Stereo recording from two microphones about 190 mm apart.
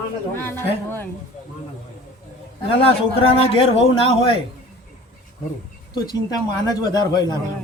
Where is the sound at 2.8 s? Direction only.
30° left (ahead or behind).